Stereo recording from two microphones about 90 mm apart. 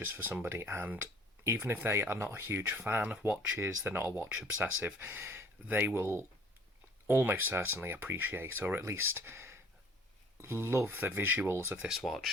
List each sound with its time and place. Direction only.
0.0 s speech: 20° right (ahead or behind)
11.8 s speech: 5° right (ahead or behind)